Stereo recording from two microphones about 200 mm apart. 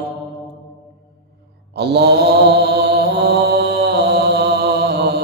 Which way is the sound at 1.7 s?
55° right (ahead or behind).